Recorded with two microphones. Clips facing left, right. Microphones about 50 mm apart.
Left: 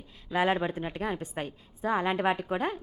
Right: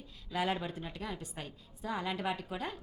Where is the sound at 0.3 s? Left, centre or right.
Left.